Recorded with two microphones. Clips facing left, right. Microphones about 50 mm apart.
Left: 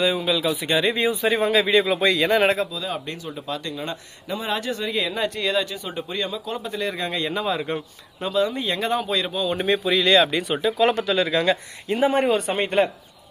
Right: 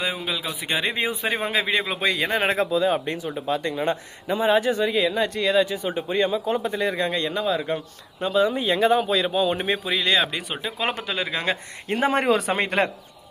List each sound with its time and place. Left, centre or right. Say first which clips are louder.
0.0 s speech: left 6 dB; centre
2.6 s speech: right 6 dB; right
4.9 s a man's voice: right 2 dB; centre
5.7 s speech: right 5 dB; centre
6.7 s a man's voice: right 2 dB; centre
8.2 s speech: right 2 dB; centre
10.6 s speech: left 8 dB; centre
11.9 s a man's voice: left 1 dB; right